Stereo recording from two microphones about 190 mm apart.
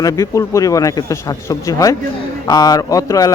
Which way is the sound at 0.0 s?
15° left (ahead or behind).